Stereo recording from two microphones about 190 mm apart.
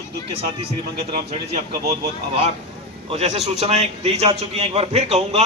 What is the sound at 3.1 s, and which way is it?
A man's voice, 35° right (ahead or behind).